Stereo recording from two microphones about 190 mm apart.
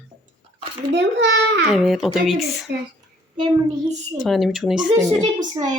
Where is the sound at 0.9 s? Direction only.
65° right (ahead or behind).